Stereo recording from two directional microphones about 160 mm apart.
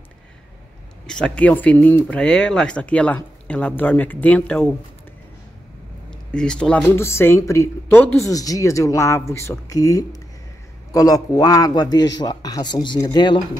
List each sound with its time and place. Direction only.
1.0 s speech: 5° left (ahead or behind)
6.0 s a man's voice: 5° left (ahead or behind); by 13.4 s 25° left (ahead or behind)